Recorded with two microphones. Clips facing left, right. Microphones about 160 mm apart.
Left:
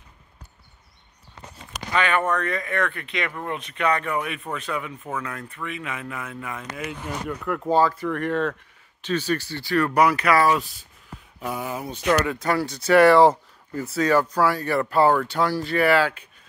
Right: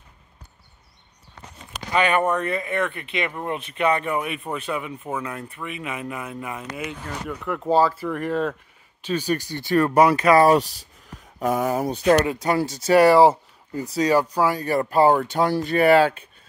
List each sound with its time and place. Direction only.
1.9 s speech: 15° right (ahead or behind)
2.6 s speech: 25° right (ahead or behind)
4.7 s speech: 10° right (ahead or behind)
6.8 s speech: centre (ahead or behind); by 10.4 s 25° right (ahead or behind)
11.1 s speech: 45° right (ahead or behind)
12.3 s speech: 20° right (ahead or behind)
13.1 s speech: 10° right (ahead or behind); by 16.3 s 25° right (ahead or behind)